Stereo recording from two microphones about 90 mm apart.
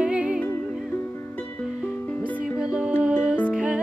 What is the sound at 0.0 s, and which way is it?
Music, 10° right (ahead or behind).